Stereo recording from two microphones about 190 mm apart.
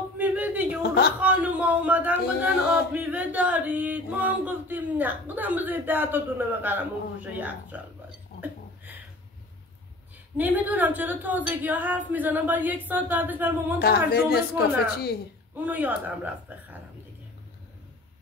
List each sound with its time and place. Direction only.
0.2 s a sound: 10° right (ahead or behind)
1.2 s speech: 10° right (ahead or behind)
10.3 s speech: 10° right (ahead or behind)
13.7 s a woman's voice: 55° left (ahead or behind)
15.5 s speech: 10° right (ahead or behind)